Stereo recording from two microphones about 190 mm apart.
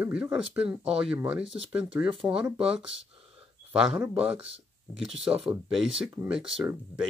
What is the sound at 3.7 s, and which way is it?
Speech, 5° right (ahead or behind).